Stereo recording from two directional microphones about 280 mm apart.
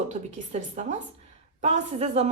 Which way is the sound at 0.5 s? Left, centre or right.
Right.